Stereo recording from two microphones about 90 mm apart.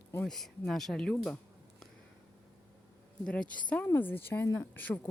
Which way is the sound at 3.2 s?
10° left (ahead or behind).